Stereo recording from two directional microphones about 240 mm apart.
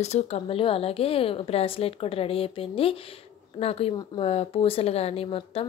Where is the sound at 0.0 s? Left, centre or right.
Left.